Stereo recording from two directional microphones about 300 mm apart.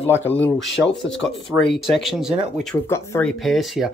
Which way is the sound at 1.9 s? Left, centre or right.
Centre.